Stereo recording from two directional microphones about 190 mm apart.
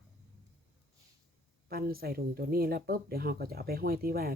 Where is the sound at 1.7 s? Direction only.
50° right (ahead or behind).